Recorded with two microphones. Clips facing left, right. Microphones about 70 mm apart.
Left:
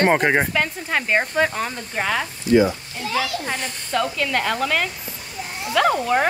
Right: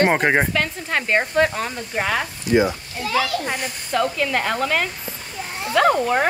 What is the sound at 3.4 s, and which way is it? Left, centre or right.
Speech, centre.